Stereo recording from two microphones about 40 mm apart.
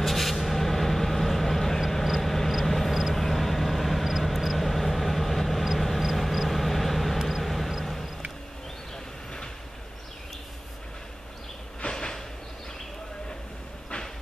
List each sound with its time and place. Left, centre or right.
0.0 s vehicle: centre
8.9 s vehicle: centre
11.8 s train: centre